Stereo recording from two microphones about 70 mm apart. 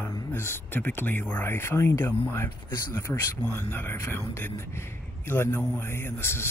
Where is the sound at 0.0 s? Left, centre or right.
Left.